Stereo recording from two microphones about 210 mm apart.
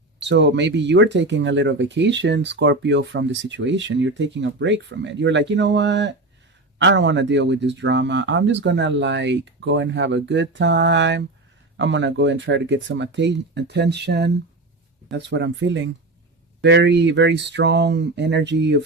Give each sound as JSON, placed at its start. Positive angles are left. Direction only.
{"t": 0.3, "sound": "speech", "side_deg": -55}